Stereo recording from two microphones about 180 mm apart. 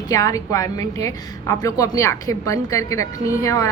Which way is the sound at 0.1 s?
20° left (ahead or behind).